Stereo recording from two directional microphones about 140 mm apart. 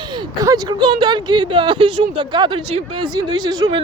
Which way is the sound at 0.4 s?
30° right (ahead or behind).